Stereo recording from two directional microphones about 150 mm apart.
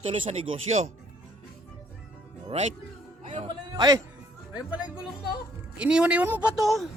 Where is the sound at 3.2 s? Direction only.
40° right (ahead or behind).